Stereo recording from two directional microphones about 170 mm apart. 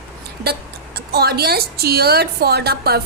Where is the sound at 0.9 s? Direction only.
70° right (ahead or behind).